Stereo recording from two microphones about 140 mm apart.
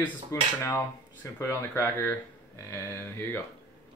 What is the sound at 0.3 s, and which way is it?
Speech, 20° left (ahead or behind).